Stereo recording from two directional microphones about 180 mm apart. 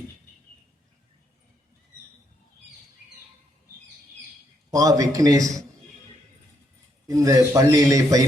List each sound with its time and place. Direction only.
4.7 s a man's voice: 20° right (ahead or behind)
7.1 s a man's voice: 20° right (ahead or behind)